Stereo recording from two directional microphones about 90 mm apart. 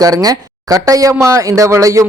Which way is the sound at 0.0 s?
45° right (ahead or behind).